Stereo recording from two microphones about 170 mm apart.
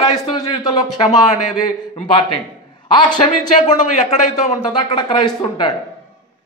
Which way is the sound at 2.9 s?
25° left (ahead or behind).